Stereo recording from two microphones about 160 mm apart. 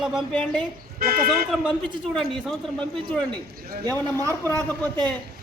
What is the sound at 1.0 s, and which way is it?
Speech, 70° right (ahead or behind).